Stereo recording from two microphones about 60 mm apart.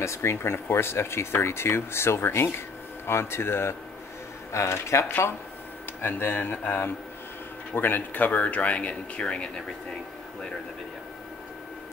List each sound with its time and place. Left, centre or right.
0.0 s speech: left
5.0 s speech: left; by 9.5 s centre